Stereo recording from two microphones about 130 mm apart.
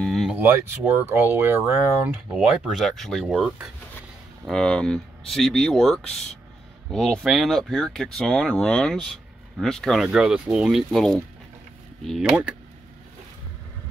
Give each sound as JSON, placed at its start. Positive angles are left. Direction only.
{"t": 0.0, "sound": "a sound", "side_deg": 0}
{"t": 0.4, "sound": "speech", "side_deg": -15}
{"t": 2.3, "sound": "speech", "side_deg": 0}
{"t": 12.2, "sound": "speech", "side_deg": -10}